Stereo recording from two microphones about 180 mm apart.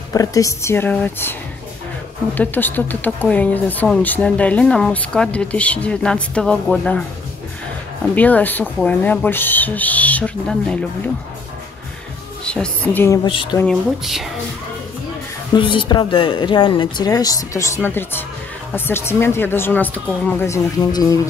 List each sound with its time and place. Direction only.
0.1 s speech: 20° left (ahead or behind)
2.3 s speech: 10° left (ahead or behind)
8.1 s speech: 10° left (ahead or behind)
12.4 s speech: 5° left (ahead or behind)
13.2 s speech: 25° left (ahead or behind)
13.6 s speech: centre (ahead or behind)
15.5 s speech: 25° left (ahead or behind)